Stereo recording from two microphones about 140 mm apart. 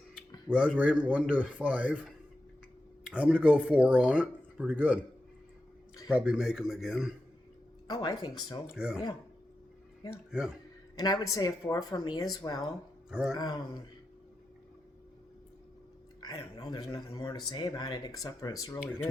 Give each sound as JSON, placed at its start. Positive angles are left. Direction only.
{"t": 0.4, "sound": "speech", "side_deg": -5}
{"t": 3.0, "sound": "speech", "side_deg": -5}
{"t": 6.1, "sound": "speech", "side_deg": -10}
{"t": 7.9, "sound": "speech", "side_deg": 25}
{"t": 8.7, "sound": "speech", "side_deg": -5}
{"t": 10.1, "sound": "speech", "side_deg": -5}
{"t": 10.9, "sound": "speech", "side_deg": 25}
{"t": 13.1, "sound": "speech", "side_deg": -5}
{"t": 13.3, "sound": "speech", "side_deg": 30}
{"t": 16.2, "sound": "speech", "side_deg": 30}